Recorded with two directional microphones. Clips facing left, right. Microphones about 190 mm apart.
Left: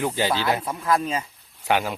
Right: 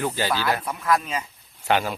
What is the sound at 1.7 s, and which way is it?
Speech, 10° left (ahead or behind).